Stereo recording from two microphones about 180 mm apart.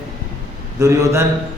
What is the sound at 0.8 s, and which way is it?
Speech, 15° right (ahead or behind).